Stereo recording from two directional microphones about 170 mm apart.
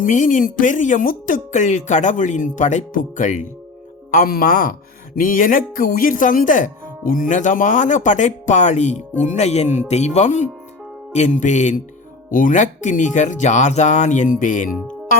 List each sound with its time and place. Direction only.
0.0 s speech: 50° left (ahead or behind)